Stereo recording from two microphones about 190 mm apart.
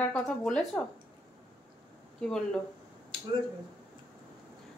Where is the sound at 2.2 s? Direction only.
5° left (ahead or behind).